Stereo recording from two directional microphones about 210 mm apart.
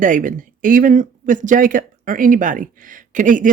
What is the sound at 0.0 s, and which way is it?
Speech, 40° right (ahead or behind).